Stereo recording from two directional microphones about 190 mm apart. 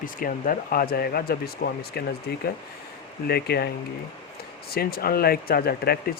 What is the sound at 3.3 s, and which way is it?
Speech, 55° left (ahead or behind).